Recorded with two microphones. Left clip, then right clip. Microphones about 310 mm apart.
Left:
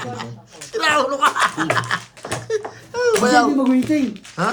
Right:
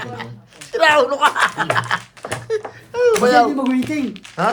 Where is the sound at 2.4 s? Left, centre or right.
Centre.